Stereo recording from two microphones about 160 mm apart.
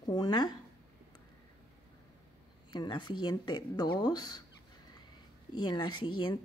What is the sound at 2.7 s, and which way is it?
A woman's voice, 30° left (ahead or behind).